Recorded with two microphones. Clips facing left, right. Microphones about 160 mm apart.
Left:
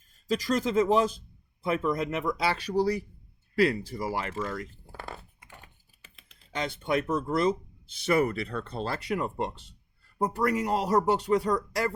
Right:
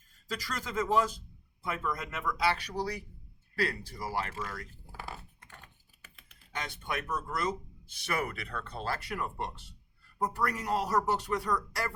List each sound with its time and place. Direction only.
0.4 s speech: 25° left (ahead or behind)
6.0 s speech: 20° left (ahead or behind)